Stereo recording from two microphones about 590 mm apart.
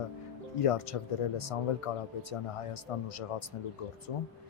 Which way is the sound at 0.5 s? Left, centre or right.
Left.